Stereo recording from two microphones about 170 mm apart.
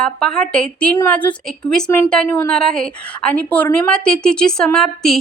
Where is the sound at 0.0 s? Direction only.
5° left (ahead or behind).